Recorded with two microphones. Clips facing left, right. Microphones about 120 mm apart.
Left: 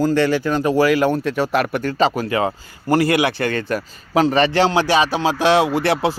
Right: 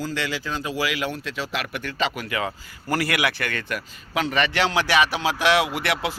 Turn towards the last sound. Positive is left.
turn(degrees=35)  # may be behind; listen again after turning